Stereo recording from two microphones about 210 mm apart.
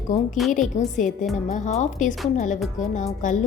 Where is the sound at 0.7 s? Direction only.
35° left (ahead or behind).